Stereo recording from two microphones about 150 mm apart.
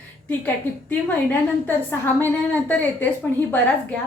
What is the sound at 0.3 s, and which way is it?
A woman's voice, 10° left (ahead or behind).